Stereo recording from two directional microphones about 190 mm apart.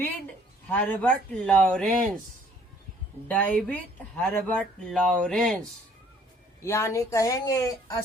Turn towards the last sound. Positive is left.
turn(degrees=20)  # may be behind; listen again after turning